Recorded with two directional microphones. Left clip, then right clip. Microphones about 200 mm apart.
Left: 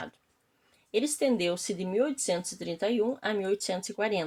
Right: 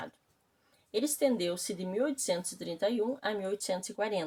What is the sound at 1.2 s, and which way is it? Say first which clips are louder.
Speech: even; 35° left (ahead or behind).